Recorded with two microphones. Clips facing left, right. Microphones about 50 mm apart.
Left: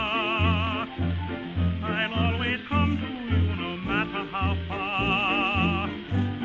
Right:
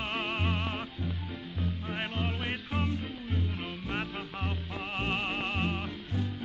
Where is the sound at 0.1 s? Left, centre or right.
Left.